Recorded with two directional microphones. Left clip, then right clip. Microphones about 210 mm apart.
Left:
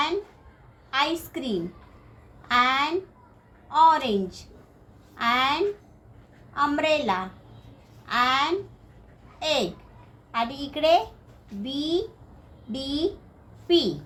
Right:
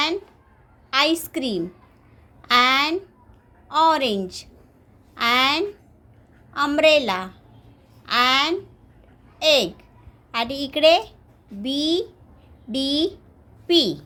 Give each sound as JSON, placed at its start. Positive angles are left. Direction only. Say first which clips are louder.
{"t": 0.9, "sound": "a woman's voice", "louder": "right 5 dB", "side_deg": -45}
{"t": 2.5, "sound": "a sound", "louder": "right 4 dB", "side_deg": -45}
{"t": 3.7, "sound": "a woman's voice", "louder": "right 1 dB", "side_deg": -45}